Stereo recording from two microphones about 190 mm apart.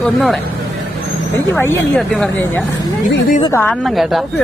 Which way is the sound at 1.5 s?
10° left (ahead or behind).